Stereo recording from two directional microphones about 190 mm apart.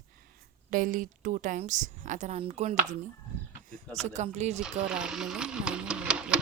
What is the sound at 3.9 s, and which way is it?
Speech, 35° right (ahead or behind).